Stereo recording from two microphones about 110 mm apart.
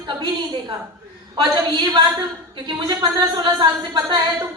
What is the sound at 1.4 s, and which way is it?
Speech, 40° right (ahead or behind).